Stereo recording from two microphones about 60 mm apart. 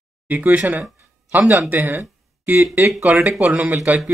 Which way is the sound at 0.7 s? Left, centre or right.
Right.